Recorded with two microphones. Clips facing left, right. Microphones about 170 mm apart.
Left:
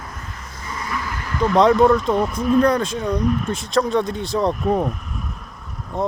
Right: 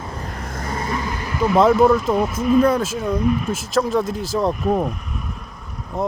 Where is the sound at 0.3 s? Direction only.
55° right (ahead or behind).